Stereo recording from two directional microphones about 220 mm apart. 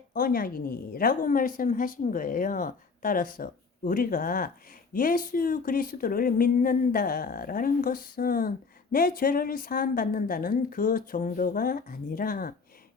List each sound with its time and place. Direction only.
0.1 s speech: 40° left (ahead or behind)